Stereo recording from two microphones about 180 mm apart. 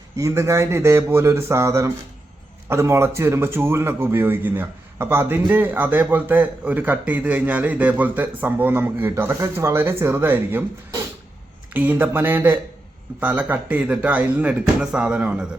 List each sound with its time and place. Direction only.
0.2 s speech: 15° right (ahead or behind)